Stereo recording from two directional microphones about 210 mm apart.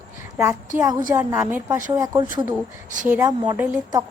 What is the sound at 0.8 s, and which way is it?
A woman's voice, 20° right (ahead or behind).